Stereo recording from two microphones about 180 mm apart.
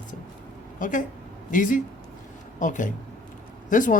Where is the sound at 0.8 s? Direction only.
45° left (ahead or behind).